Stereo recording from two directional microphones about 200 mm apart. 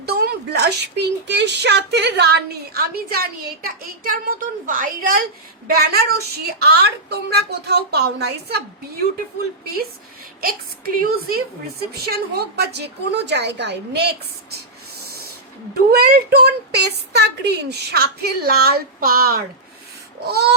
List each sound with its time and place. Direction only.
0.0 s a woman's voice: 55° right (ahead or behind)
10.4 s a woman's voice: 50° right (ahead or behind)
15.7 s a woman's voice: 50° right (ahead or behind)